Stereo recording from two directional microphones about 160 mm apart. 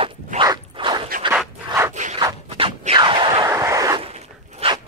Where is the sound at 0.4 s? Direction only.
30° right (ahead or behind).